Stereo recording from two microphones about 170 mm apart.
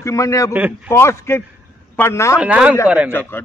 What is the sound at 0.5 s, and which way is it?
Speech, 10° right (ahead or behind).